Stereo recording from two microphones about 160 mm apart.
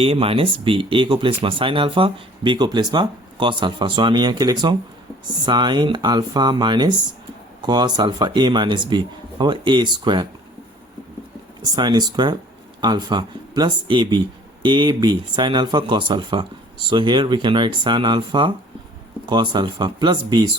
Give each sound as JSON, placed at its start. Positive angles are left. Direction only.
{"t": 0.0, "sound": "speech", "side_deg": -35}
{"t": 11.7, "sound": "speech", "side_deg": -25}